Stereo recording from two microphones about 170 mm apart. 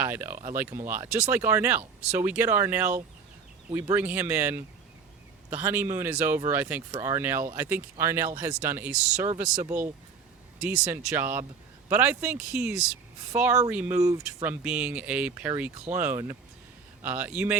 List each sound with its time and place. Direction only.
0.0 s speech: 10° right (ahead or behind)
3.9 s speech: 10° right (ahead or behind)
14.4 s speech: 5° right (ahead or behind)